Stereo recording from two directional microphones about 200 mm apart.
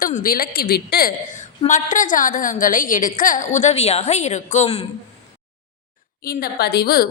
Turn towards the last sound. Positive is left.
turn(degrees=50)  # may be behind; listen again after turning